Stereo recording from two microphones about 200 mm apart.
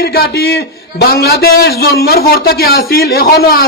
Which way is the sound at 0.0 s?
50° left (ahead or behind).